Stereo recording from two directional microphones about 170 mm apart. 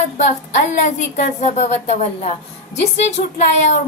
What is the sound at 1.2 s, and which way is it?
A woman's voice, 40° left (ahead or behind).